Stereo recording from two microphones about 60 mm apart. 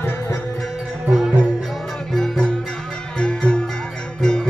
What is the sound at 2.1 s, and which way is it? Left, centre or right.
Music, centre.